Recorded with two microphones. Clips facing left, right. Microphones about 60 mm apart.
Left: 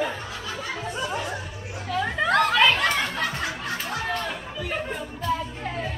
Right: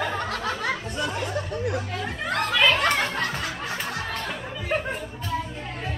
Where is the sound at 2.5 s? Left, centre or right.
Centre.